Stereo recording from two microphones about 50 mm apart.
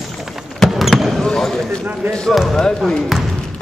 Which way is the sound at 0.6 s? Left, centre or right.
Centre.